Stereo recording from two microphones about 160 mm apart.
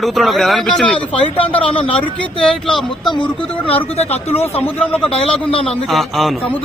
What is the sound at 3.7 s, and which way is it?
Speech, 40° left (ahead or behind).